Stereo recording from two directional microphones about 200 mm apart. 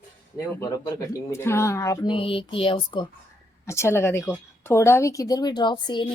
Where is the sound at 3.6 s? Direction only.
15° left (ahead or behind).